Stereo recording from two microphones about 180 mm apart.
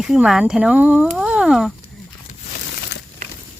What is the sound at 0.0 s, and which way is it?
Speech, 5° right (ahead or behind).